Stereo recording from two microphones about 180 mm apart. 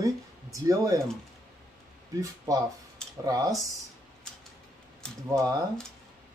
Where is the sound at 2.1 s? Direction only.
20° right (ahead or behind).